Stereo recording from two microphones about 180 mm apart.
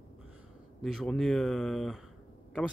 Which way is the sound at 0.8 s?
Centre (ahead or behind).